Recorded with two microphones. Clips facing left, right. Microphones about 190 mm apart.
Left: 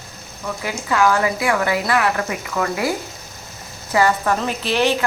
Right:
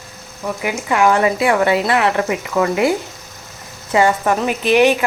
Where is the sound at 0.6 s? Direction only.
15° right (ahead or behind).